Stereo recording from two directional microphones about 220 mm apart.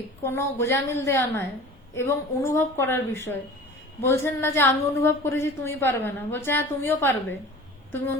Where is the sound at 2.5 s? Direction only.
10° left (ahead or behind).